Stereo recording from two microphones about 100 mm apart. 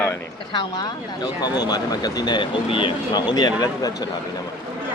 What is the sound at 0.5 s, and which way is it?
Speech, 45° left (ahead or behind).